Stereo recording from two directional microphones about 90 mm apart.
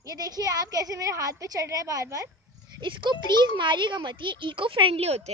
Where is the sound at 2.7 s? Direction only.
65° right (ahead or behind).